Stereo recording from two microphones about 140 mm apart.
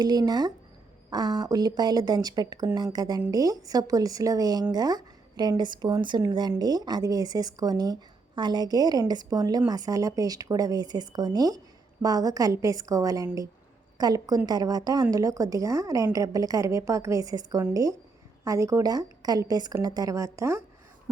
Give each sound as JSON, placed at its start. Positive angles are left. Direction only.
{"t": 0.0, "sound": "speech", "side_deg": -30}